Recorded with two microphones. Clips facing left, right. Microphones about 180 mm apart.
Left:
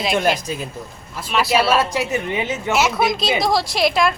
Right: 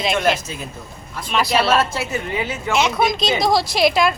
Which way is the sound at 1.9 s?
20° left (ahead or behind).